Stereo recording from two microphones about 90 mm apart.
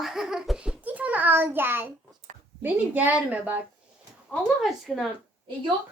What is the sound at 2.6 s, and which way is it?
Speech, 20° right (ahead or behind).